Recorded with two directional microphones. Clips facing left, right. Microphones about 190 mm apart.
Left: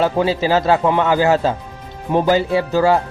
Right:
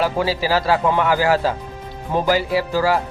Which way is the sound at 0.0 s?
25° left (ahead or behind).